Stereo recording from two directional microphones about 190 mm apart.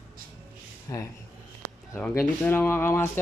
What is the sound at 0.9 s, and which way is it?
Speech, 15° left (ahead or behind).